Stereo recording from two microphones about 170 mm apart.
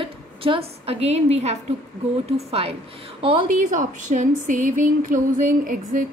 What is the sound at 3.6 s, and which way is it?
Speech, 50° right (ahead or behind).